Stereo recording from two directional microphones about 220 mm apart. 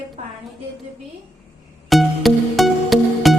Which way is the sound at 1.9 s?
Centre (ahead or behind).